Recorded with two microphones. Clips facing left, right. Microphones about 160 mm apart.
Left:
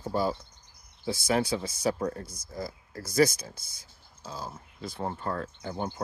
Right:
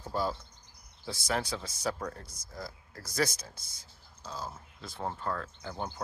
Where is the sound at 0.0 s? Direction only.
5° left (ahead or behind).